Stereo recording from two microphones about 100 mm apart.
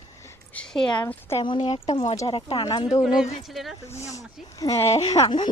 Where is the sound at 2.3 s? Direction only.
70° left (ahead or behind).